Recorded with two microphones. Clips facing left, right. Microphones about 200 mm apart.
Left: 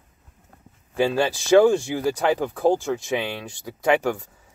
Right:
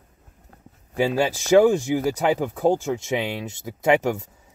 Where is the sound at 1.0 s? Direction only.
15° right (ahead or behind).